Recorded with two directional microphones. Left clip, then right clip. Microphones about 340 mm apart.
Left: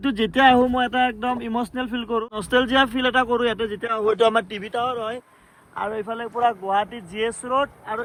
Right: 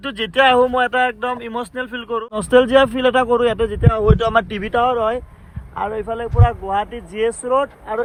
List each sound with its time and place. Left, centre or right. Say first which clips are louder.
0.0 s speech: right 2 dB; centre
5.7 s speech: right 4 dB; centre